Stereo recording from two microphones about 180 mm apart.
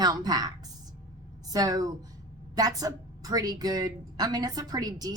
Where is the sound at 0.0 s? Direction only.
20° right (ahead or behind).